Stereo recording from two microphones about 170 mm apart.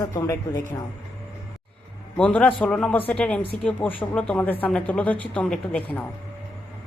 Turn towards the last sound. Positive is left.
turn(degrees=5)  # may be behind; listen again after turning